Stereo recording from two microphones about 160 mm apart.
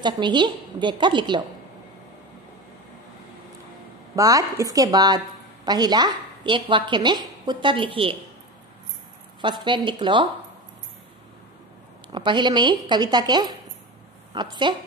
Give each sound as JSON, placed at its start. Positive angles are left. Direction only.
{"t": 0.0, "sound": "a woman's voice", "side_deg": -30}
{"t": 4.1, "sound": "a woman's voice", "side_deg": -20}
{"t": 9.4, "sound": "a woman's voice", "side_deg": -30}
{"t": 12.1, "sound": "a woman's voice", "side_deg": -30}